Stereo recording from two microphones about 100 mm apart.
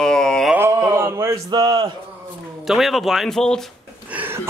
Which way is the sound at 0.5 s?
25° right (ahead or behind).